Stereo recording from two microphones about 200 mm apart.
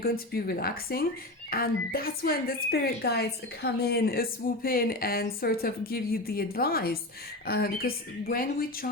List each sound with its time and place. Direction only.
0.0 s a woman's voice: 50° left (ahead or behind)